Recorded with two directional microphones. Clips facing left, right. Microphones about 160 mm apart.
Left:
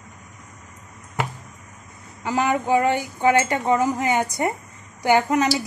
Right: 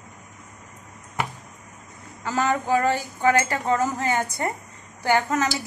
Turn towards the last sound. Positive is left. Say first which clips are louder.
# left 4 dB
turn(degrees=20)  # may be behind; listen again after turning